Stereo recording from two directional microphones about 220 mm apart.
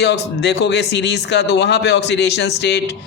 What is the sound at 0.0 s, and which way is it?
A man's voice, 50° left (ahead or behind).